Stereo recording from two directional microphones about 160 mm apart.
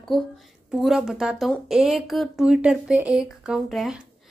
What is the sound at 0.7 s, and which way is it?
A woman's voice, centre (ahead or behind).